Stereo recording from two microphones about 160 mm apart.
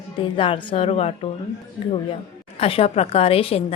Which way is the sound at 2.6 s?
35° left (ahead or behind).